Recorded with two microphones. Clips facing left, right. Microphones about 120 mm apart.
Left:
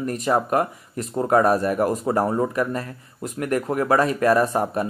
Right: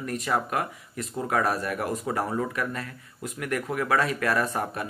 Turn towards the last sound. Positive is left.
turn(degrees=30)  # may be behind; listen again after turning